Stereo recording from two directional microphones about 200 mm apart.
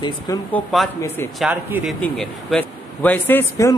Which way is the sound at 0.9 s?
10° left (ahead or behind).